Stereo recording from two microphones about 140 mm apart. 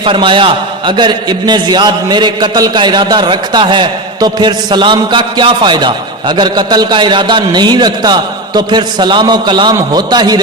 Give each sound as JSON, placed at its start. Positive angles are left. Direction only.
{"t": 0.0, "sound": "a man's voice", "side_deg": -35}